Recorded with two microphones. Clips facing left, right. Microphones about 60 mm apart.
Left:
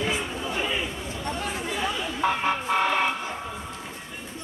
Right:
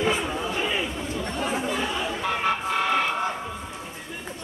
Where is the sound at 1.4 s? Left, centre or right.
Centre.